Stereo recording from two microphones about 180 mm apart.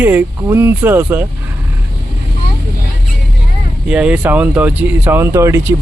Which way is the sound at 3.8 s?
5° right (ahead or behind).